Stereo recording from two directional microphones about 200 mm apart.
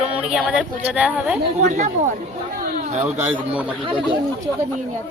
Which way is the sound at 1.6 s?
35° right (ahead or behind).